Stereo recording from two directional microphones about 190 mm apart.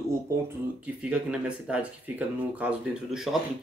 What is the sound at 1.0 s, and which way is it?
Speech, 5° right (ahead or behind).